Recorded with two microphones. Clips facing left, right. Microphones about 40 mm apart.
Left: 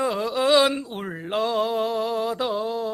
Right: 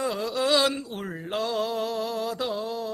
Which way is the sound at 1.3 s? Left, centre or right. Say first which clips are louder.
Left 4 dB; left.